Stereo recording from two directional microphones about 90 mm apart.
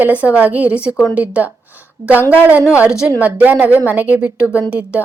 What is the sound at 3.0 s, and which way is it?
A woman's voice, 15° right (ahead or behind).